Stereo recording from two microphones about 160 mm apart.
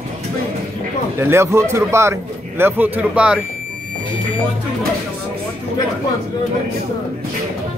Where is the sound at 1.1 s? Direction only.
15° right (ahead or behind).